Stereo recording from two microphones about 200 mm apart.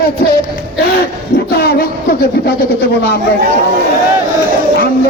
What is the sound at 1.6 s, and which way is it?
Speech, 50° left (ahead or behind).